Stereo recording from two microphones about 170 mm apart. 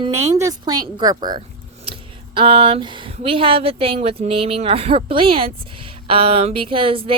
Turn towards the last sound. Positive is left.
turn(degrees=-30)  # may be behind; listen again after turning